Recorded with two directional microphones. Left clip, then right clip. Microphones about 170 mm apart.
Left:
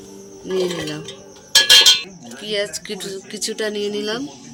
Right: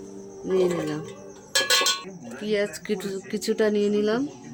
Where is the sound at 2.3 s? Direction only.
40° right (ahead or behind).